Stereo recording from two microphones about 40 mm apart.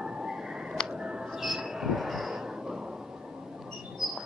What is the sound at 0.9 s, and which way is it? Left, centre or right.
Music, right.